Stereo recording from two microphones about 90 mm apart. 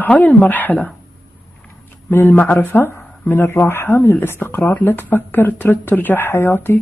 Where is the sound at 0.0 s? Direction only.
20° left (ahead or behind).